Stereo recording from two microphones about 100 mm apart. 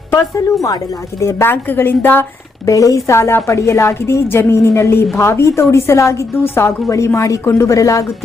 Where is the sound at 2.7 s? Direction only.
35° left (ahead or behind).